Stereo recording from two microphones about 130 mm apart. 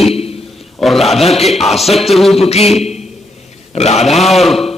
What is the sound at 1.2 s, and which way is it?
Speech, 50° left (ahead or behind).